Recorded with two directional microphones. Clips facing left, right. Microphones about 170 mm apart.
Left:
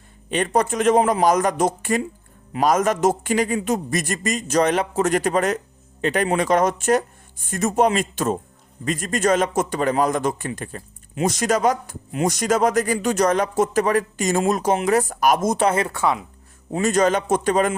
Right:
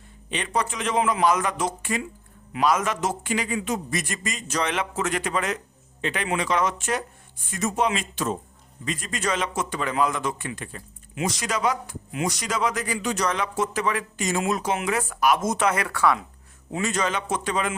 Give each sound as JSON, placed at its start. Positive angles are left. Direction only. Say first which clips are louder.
{"t": 0.3, "sound": "a man's voice", "louder": "left 7 dB", "side_deg": 45}
{"t": 16.7, "sound": "a man's voice", "louder": "left 8 dB", "side_deg": 45}